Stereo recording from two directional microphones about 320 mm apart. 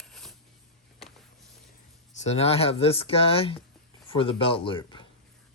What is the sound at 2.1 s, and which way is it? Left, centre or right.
Speech, centre.